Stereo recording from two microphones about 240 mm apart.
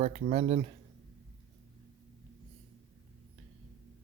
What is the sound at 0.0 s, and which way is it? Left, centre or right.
Speech, right.